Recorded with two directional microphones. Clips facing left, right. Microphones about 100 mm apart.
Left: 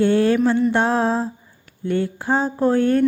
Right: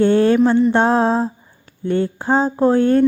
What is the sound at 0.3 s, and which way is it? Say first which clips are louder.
Speech: right 4 dB; 45° right (ahead or behind).